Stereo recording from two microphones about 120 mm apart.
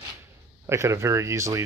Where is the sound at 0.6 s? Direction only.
25° right (ahead or behind).